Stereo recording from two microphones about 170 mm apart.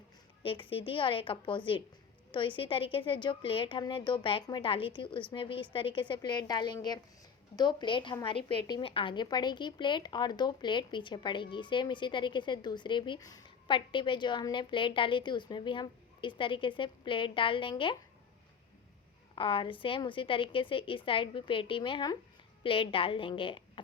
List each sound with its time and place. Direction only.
0.4 s a woman's voice: 30° left (ahead or behind)
19.4 s a woman's voice: 30° left (ahead or behind)